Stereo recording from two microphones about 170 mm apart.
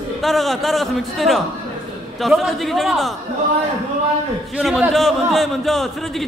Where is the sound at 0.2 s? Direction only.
Centre (ahead or behind).